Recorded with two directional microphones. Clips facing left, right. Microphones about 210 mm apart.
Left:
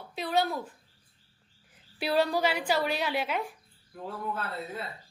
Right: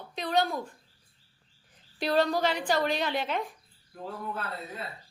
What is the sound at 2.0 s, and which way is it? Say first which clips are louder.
A woman's voice: right 1 dB; 10° left (ahead or behind).